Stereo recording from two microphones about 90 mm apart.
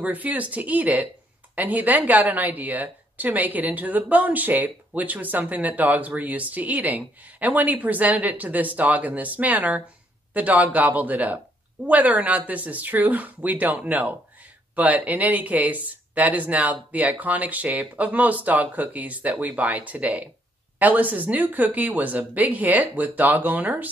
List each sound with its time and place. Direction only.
0.0 s speech: 20° right (ahead or behind)